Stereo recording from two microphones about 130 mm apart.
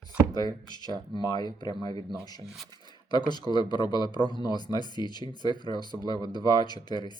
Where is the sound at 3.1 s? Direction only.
35° left (ahead or behind).